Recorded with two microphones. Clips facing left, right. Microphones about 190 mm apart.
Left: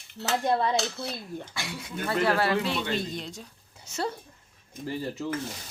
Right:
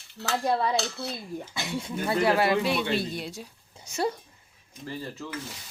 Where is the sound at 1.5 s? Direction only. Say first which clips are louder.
Right 7 dB; 25° right (ahead or behind).